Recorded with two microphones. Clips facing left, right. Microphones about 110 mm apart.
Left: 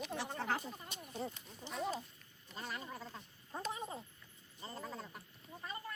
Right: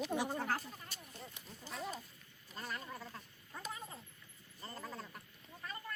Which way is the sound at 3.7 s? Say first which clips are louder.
Left 5 dB; 25° left (ahead or behind).